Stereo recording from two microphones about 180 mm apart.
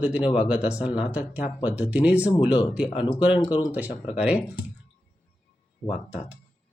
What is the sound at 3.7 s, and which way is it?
Speech, 5° right (ahead or behind).